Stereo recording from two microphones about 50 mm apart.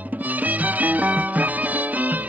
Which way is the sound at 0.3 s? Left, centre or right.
Right.